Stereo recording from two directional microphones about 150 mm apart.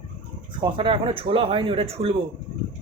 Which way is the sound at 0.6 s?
35° right (ahead or behind).